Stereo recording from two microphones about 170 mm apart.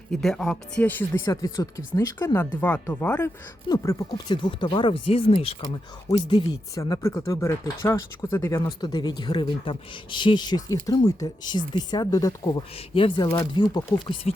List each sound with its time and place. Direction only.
0.1 s speech: 5° left (ahead or behind); by 14.2 s 25° left (ahead or behind)